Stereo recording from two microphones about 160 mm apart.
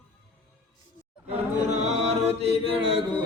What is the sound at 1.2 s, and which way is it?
A capella, 45° right (ahead or behind).